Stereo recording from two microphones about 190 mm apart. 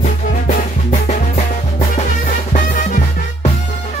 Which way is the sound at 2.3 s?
45° left (ahead or behind).